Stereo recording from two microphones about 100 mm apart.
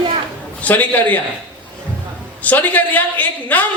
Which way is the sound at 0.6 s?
15° left (ahead or behind).